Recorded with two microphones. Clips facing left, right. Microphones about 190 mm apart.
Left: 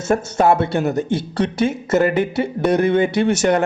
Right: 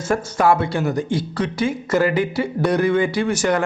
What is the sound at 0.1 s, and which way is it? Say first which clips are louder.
A man's voice: left 2 dB; 25° left (ahead or behind).